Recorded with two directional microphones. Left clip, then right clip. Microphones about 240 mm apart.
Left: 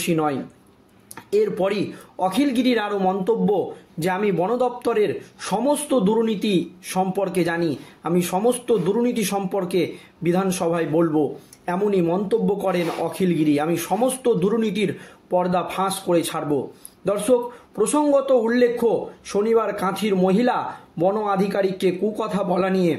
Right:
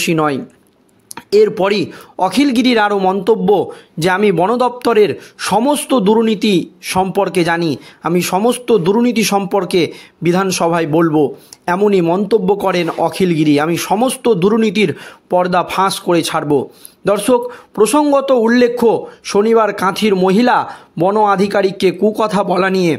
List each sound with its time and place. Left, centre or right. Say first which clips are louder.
0.0 s speech: right 7 dB; right